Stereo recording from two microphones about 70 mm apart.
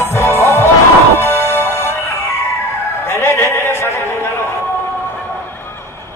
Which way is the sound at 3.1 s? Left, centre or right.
Left.